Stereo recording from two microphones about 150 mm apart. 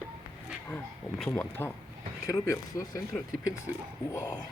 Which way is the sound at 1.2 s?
10° left (ahead or behind).